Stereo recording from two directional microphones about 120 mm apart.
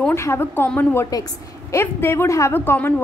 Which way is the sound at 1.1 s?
30° left (ahead or behind).